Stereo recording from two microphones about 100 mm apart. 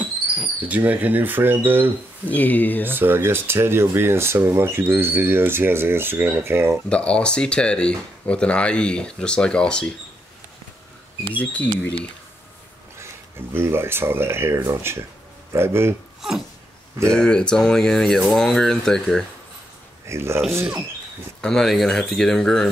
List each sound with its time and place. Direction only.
0.7 s speech: 15° right (ahead or behind)
2.2 s speech: 15° left (ahead or behind)
2.8 s speech: 20° right (ahead or behind)
6.9 s speech: 10° left (ahead or behind)
11.3 s speech: 15° left (ahead or behind)
13.5 s speech: 25° right (ahead or behind)
16.2 s a sound: 5° right (ahead or behind)
17.1 s speech: 10° left (ahead or behind)
20.1 s speech: 25° right (ahead or behind)
21.4 s speech: 5° left (ahead or behind)